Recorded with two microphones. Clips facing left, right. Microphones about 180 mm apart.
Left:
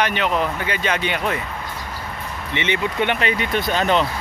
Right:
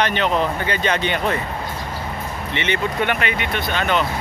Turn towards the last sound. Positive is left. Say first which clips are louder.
# left 2 dB
turn(degrees=35)  # may be behind; listen again after turning